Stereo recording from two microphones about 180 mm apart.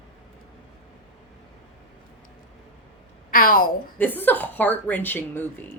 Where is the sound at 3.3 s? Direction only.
50° left (ahead or behind).